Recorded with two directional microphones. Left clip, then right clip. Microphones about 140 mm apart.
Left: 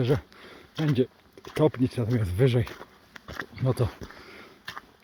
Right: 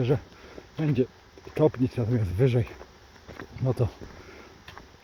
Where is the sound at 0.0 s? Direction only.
15° right (ahead or behind).